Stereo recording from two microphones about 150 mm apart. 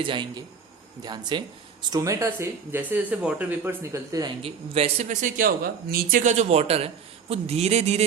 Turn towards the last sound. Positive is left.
turn(degrees=-45)  # may be behind; listen again after turning